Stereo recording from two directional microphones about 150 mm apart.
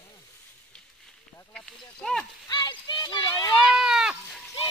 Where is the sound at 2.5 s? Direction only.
30° left (ahead or behind).